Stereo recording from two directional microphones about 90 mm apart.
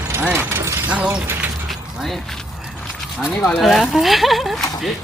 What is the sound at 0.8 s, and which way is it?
Speech, 15° right (ahead or behind).